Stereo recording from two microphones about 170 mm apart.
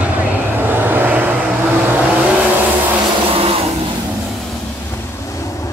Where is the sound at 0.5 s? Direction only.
10° right (ahead or behind).